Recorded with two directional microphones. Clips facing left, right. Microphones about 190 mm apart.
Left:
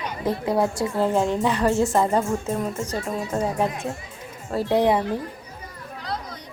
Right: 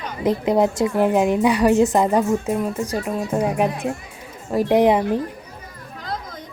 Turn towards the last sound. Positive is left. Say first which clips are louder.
# right 4 dB
turn(degrees=-20)  # may be behind; listen again after turning